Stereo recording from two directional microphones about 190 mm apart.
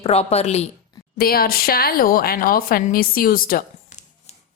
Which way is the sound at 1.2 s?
50° left (ahead or behind).